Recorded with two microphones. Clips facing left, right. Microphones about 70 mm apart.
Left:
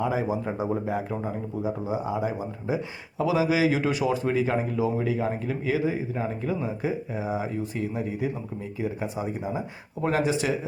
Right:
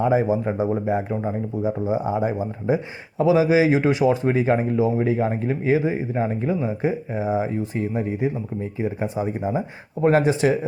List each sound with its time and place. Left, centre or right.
0.0 s speech: right